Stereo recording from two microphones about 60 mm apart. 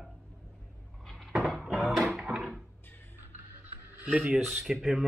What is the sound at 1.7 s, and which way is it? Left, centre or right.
Music, centre.